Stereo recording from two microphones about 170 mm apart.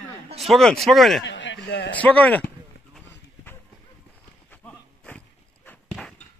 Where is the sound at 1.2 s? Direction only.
90° left.